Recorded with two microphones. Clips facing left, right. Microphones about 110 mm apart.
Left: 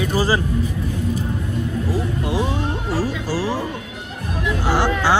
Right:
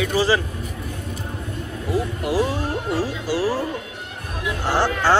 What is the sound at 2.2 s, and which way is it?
Speech, 25° left (ahead or behind).